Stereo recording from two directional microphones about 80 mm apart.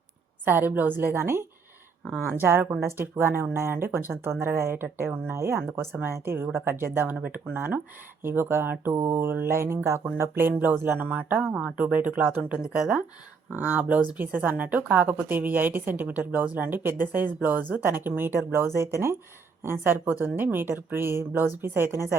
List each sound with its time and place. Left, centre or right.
0.4 s speech: right